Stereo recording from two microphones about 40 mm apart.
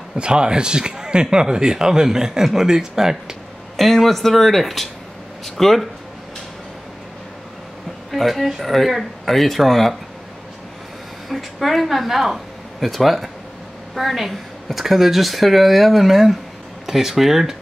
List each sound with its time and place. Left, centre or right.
0.2 s speech: right
3.8 s speech: centre
8.1 s speech: centre
11.2 s speech: centre